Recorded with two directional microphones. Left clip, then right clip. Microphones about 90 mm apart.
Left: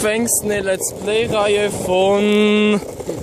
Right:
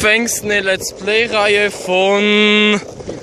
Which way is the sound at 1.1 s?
25° right (ahead or behind).